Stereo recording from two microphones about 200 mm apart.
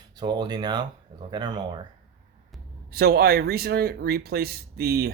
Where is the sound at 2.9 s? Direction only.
50° right (ahead or behind).